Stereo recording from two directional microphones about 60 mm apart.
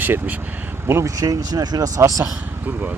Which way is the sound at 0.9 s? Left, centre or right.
Right.